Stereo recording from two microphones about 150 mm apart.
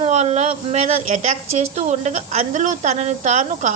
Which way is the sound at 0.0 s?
45° right (ahead or behind).